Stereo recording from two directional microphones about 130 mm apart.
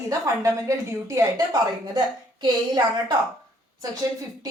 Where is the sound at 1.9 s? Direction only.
35° right (ahead or behind).